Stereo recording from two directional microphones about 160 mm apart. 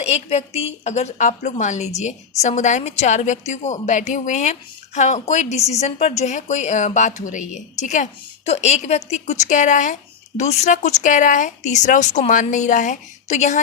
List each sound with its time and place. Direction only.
0.0 s a woman's voice: 40° left (ahead or behind)